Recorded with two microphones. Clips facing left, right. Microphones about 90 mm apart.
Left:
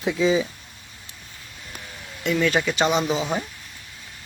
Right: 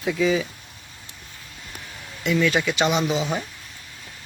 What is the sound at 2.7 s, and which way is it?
Speech, 35° left (ahead or behind).